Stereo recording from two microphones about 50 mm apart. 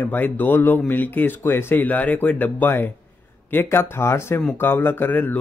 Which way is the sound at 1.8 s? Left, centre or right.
Left.